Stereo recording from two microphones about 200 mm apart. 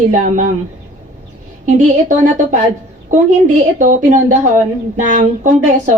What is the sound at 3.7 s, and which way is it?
A woman's voice, 40° right (ahead or behind).